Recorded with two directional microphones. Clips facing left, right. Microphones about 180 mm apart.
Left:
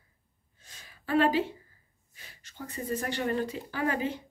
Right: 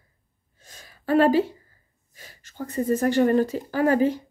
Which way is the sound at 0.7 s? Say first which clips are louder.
Right 7 dB; 40° right (ahead or behind).